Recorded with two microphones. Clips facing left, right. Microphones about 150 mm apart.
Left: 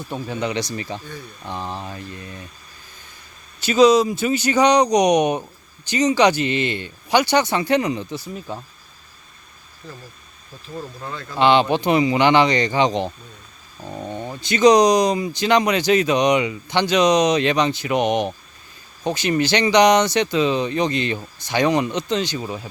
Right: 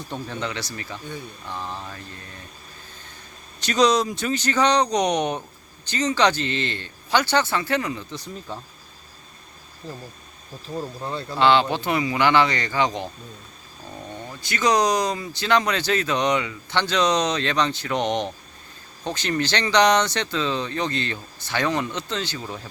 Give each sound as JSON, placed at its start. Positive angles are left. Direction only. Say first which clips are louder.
{"t": 0.1, "sound": "speech", "louder": "left 5 dB", "side_deg": 10}
{"t": 3.6, "sound": "speech", "louder": "left 6 dB", "side_deg": 5}
{"t": 9.8, "sound": "speech", "louder": "right 2 dB", "side_deg": -35}
{"t": 11.3, "sound": "speech", "louder": "left 3 dB", "side_deg": 15}